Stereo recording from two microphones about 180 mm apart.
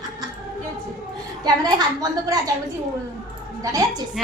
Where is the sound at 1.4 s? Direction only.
20° right (ahead or behind).